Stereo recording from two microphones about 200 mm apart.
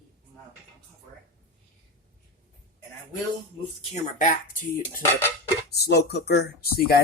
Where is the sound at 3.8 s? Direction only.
40° left (ahead or behind).